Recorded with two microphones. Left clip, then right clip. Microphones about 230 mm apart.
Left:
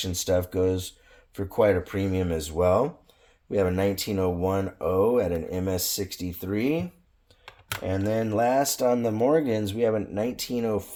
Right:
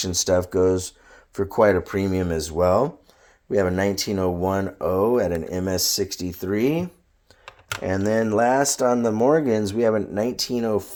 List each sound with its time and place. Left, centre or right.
0.0 s speech: right
5.7 s speech: centre
6.1 s speech: right
8.0 s speech: right